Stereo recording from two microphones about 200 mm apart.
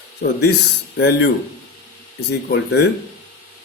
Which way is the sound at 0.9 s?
60° left (ahead or behind).